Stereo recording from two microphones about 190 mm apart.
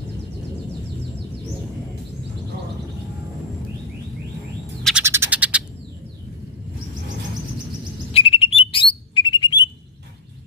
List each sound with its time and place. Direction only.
5.0 s bird: 15° right (ahead or behind)
8.1 s bird: 30° left (ahead or behind)